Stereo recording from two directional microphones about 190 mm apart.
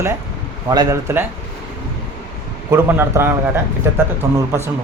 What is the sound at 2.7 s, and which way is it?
Speech, 10° right (ahead or behind).